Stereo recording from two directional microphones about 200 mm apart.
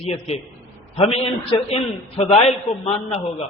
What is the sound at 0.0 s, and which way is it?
A man's voice, 30° left (ahead or behind).